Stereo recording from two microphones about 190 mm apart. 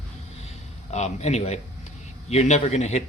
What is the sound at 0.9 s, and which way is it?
Speech, 35° left (ahead or behind).